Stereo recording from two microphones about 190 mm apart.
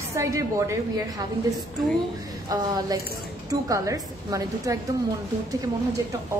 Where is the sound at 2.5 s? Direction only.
20° right (ahead or behind).